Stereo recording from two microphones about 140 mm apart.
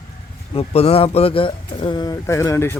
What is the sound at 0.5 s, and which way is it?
Speech, 45° left (ahead or behind).